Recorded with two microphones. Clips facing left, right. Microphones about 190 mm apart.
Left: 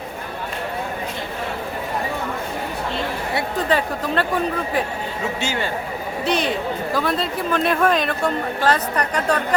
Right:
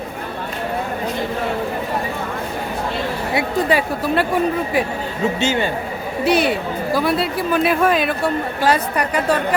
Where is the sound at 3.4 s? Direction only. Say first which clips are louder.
Right 3 dB; 10° right (ahead or behind).